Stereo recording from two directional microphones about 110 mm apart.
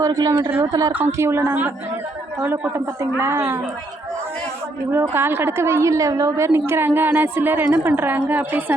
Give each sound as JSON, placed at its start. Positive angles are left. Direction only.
{"t": 0.0, "sound": "a woman's voice", "side_deg": -30}
{"t": 5.1, "sound": "a woman's voice", "side_deg": -20}